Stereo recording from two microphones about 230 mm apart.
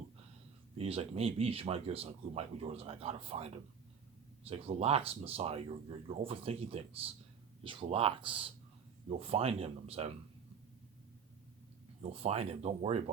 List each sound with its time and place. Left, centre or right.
0.8 s speech: right
12.1 s speech: right